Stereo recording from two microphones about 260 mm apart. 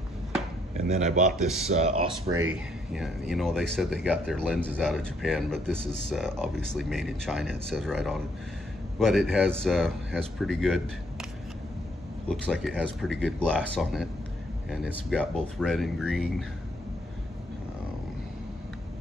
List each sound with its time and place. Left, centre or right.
0.7 s speech: right
1.3 s speech: centre
1.7 s speech: right
2.2 s speech: centre
12.3 s speech: centre